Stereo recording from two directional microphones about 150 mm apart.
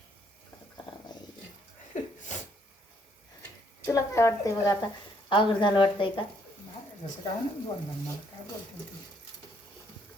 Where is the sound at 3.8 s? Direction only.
20° left (ahead or behind).